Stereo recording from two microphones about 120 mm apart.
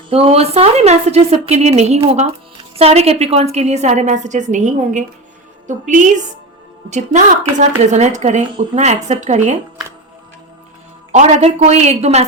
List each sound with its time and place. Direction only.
0.1 s a woman's voice: 55° right (ahead or behind); by 7.3 s 90° right
7.6 s a woman's voice: 80° right
11.1 s a woman's voice: 75° right (ahead or behind)